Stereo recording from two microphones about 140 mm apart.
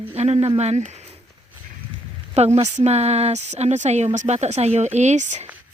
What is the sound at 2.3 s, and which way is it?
Speech, 50° right (ahead or behind).